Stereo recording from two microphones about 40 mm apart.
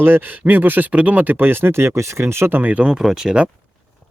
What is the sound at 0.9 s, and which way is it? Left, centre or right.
Speech, right.